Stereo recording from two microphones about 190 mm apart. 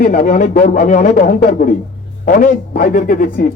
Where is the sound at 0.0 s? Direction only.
45° left (ahead or behind).